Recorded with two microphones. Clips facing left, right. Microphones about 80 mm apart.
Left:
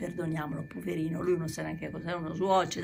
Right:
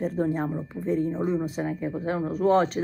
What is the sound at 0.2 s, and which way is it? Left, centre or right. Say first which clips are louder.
Speech: right 8 dB; right.